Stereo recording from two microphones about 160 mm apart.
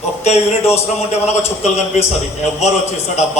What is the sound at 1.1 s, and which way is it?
Speech, 45° left (ahead or behind).